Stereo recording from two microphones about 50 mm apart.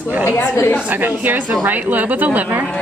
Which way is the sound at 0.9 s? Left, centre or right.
Right.